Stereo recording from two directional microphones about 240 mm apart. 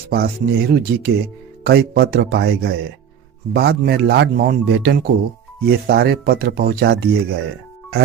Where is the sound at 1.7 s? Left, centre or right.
Right.